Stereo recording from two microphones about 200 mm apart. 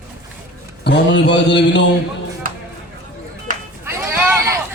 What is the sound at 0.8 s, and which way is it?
Speech, 60° left (ahead or behind).